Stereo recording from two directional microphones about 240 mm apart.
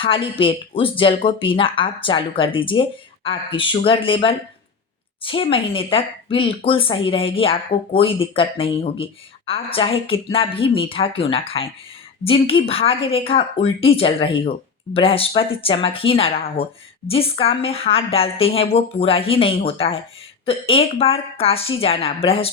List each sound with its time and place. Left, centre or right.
0.0 s speech: left